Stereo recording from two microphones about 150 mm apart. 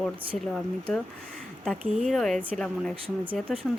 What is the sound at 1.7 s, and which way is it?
Speech, centre (ahead or behind).